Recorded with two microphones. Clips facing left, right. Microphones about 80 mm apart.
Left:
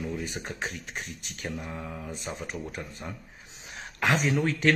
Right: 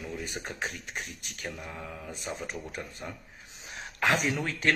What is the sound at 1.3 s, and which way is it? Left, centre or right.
Speech, left.